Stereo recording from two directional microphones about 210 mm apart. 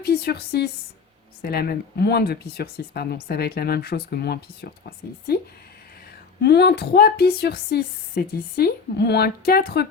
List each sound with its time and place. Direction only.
0.0 s speech: 50° left (ahead or behind)
6.4 s speech: 50° left (ahead or behind)